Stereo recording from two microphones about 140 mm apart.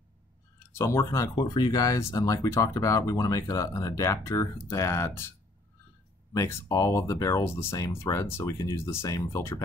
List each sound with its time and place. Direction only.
0.7 s speech: 20° left (ahead or behind)
6.3 s speech: 20° left (ahead or behind)